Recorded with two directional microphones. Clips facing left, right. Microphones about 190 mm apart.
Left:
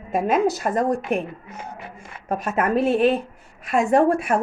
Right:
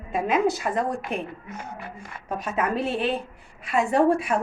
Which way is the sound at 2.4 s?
50° left (ahead or behind).